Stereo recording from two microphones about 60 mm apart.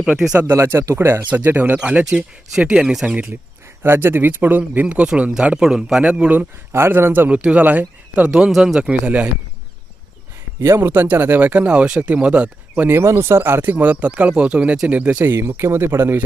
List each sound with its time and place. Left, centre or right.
0.1 s speech: centre
0.5 s speech: right
1.2 s speech: right
2.0 s speech: centre
3.8 s speech: right
6.7 s speech: right
7.3 s speech: right
8.8 s speech: right
10.6 s speech: right
12.9 s speech: right
15.3 s speech: right